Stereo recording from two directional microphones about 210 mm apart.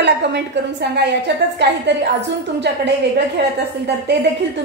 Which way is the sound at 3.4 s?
55° right (ahead or behind).